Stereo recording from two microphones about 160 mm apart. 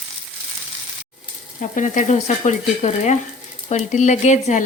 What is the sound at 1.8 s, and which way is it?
Speech, 50° left (ahead or behind).